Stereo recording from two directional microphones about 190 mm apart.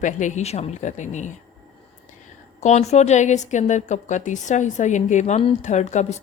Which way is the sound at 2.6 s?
35° left (ahead or behind).